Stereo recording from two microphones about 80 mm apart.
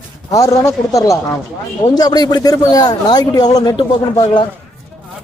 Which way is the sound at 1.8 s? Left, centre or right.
Left.